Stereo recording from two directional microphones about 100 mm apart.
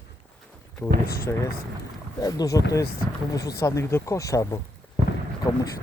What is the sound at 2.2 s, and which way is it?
Speech, 40° left (ahead or behind).